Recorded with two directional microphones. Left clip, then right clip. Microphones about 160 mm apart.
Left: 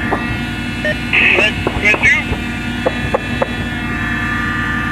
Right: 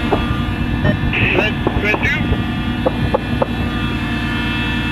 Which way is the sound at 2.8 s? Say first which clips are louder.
Left 1 dB; 40° right (ahead or behind).